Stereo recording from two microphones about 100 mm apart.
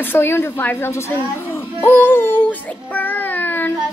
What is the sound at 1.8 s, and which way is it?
Child singing, 20° left (ahead or behind).